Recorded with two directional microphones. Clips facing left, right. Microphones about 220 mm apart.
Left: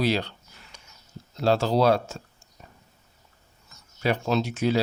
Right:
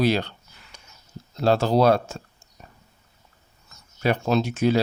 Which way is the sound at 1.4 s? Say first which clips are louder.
Right 2 dB; 50° right (ahead or behind).